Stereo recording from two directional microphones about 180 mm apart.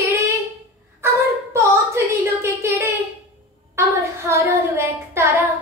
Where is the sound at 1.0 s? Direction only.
15° right (ahead or behind).